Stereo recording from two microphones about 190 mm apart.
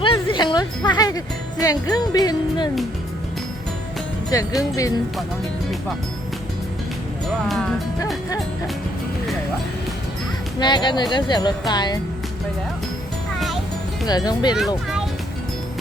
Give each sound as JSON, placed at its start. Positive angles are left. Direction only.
{"t": 0.0, "sound": "music", "side_deg": 25}
{"t": 4.3, "sound": "music", "side_deg": 20}
{"t": 10.6, "sound": "music", "side_deg": 25}
{"t": 14.1, "sound": "music", "side_deg": 20}